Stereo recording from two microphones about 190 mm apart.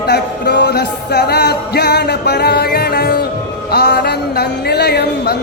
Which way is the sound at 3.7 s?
55° left (ahead or behind).